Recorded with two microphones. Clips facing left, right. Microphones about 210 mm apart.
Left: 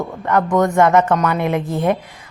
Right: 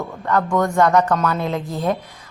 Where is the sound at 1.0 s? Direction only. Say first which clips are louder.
Left 2 dB; centre (ahead or behind).